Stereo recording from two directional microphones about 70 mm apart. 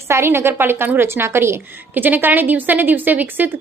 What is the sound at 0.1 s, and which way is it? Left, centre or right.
A woman's voice, right.